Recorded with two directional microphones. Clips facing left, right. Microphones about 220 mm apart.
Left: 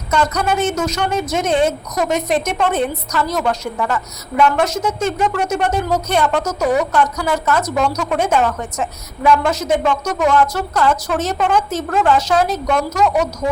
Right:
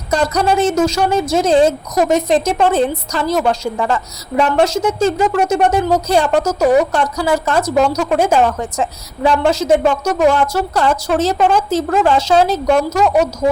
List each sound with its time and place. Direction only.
0.1 s a woman's voice: 30° right (ahead or behind)